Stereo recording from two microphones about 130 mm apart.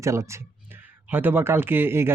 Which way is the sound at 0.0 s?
20° right (ahead or behind).